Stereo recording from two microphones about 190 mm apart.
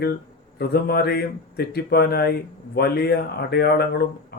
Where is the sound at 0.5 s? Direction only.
55° left (ahead or behind).